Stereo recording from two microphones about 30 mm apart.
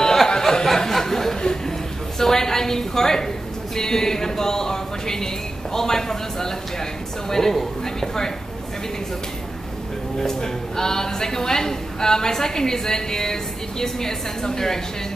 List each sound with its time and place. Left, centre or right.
0.0 s a sound: centre
3.7 s speech: centre
10.2 s speech: centre